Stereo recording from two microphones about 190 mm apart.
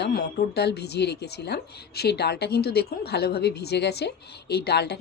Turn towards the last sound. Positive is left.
turn(degrees=60)  # may be behind; listen again after turning